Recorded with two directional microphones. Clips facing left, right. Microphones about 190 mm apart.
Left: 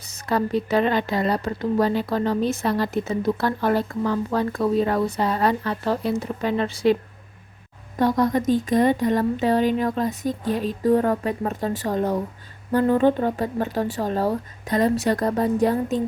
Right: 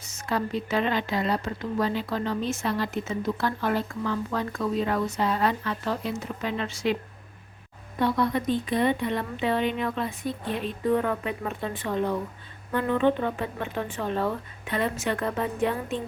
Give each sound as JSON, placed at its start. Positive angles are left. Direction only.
{"t": 0.0, "sound": "a woman's voice", "side_deg": 35}
{"t": 7.9, "sound": "a woman's voice", "side_deg": 40}